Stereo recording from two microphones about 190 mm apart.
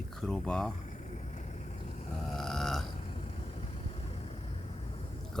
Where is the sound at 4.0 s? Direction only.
35° left (ahead or behind).